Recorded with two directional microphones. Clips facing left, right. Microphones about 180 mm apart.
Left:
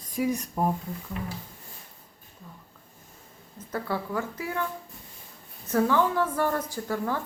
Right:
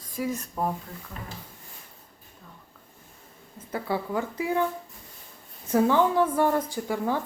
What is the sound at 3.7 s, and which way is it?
Speech, 15° right (ahead or behind).